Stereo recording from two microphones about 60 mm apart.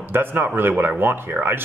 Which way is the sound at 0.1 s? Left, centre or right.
Right.